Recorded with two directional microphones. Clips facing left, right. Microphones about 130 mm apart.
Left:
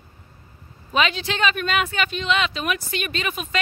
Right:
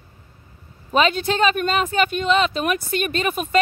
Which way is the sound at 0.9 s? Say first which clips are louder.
Right 4 dB; 40° right (ahead or behind).